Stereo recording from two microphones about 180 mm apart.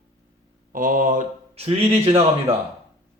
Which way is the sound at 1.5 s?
35° right (ahead or behind).